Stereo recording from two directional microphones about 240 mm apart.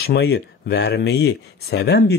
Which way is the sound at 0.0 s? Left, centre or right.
Left.